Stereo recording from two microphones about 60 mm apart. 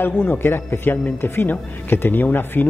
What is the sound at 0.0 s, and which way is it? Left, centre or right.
Speech, left.